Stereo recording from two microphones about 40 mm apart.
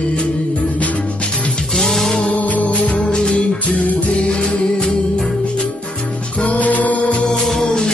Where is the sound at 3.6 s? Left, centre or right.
Left.